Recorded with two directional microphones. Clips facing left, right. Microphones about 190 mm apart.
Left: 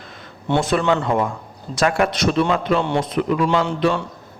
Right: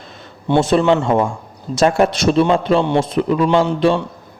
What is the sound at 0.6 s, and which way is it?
Speech, 25° right (ahead or behind).